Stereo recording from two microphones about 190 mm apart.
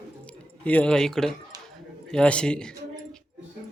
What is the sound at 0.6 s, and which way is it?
Speech, 5° left (ahead or behind).